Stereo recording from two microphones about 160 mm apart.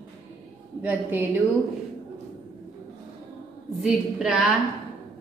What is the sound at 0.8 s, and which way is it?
Speech, 10° right (ahead or behind).